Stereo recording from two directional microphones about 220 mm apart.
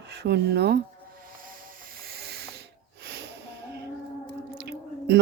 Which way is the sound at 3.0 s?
50° right (ahead or behind).